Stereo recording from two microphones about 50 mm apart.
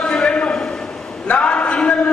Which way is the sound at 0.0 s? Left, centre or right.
Centre.